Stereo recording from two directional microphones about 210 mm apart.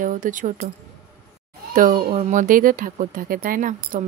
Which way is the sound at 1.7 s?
40° right (ahead or behind).